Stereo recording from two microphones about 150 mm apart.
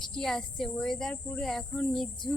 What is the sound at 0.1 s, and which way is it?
Speech, centre (ahead or behind).